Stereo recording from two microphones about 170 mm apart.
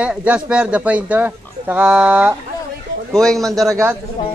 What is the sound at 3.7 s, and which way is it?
Speech, 15° right (ahead or behind).